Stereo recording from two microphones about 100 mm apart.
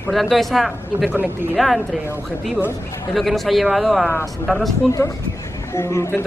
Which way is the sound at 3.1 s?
Centre (ahead or behind).